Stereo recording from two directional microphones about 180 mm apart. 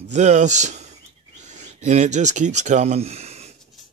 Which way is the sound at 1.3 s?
40° right (ahead or behind).